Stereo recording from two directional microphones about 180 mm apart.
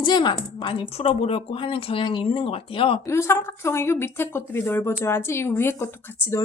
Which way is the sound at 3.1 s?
15° left (ahead or behind).